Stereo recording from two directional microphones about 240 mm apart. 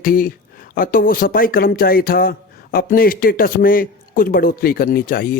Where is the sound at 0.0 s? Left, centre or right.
Left.